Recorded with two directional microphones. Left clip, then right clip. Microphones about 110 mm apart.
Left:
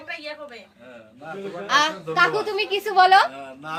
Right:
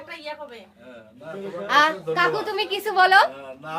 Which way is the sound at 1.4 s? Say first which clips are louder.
Right 2 dB; 30° right (ahead or behind).